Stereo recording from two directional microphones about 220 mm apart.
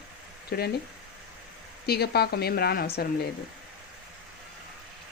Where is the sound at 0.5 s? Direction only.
45° left (ahead or behind).